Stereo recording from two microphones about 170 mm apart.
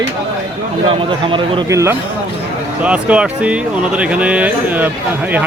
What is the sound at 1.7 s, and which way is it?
Speech, 15° right (ahead or behind).